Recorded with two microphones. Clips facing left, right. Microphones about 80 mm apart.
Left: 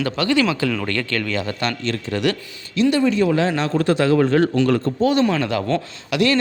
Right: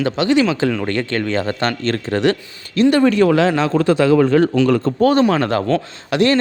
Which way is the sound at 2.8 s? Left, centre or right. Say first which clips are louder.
Right 4 dB; right.